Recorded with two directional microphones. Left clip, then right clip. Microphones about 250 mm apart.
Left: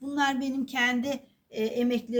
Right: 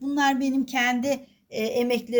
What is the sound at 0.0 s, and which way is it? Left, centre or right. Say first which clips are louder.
A woman's voice: right 4 dB; right.